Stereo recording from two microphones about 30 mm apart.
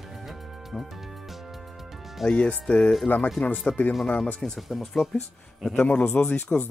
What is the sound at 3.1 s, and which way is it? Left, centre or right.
Speech, left.